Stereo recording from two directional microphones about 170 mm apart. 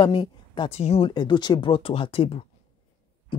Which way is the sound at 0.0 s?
25° left (ahead or behind).